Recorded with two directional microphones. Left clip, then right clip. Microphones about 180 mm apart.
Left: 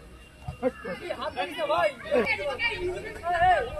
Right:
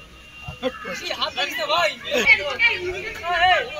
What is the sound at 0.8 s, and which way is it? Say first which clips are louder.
A man's voice: right 7 dB; 55° left (ahead or behind).